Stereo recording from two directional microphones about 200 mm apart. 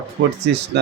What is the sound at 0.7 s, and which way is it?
Speech, 60° right (ahead or behind).